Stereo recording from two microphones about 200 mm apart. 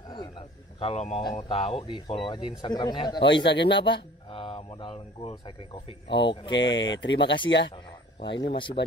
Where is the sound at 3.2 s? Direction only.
60° left (ahead or behind).